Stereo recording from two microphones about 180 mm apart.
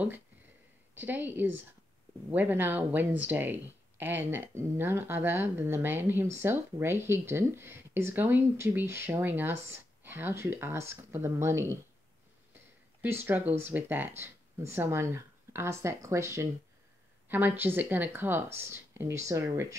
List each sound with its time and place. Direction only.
0.9 s speech: 10° right (ahead or behind)
13.0 s speech: 10° right (ahead or behind)